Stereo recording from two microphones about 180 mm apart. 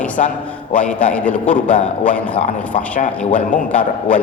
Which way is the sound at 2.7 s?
45° left (ahead or behind).